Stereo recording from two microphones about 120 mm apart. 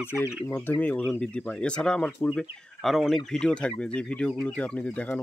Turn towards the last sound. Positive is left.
turn(degrees=10)  # may be behind; listen again after turning